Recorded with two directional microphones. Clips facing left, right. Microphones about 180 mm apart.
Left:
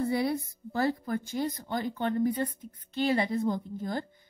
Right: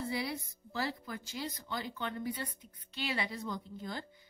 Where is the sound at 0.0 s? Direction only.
50° left (ahead or behind).